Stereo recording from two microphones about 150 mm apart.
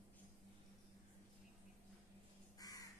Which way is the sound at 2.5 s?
25° left (ahead or behind).